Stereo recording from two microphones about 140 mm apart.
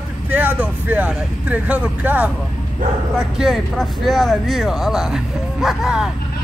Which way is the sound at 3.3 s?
Centre (ahead or behind).